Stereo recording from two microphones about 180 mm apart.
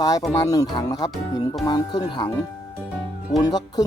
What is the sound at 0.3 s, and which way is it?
Speech, 20° left (ahead or behind).